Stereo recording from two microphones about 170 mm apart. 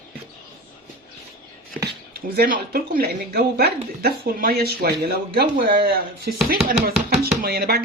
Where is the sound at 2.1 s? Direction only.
65° right (ahead or behind).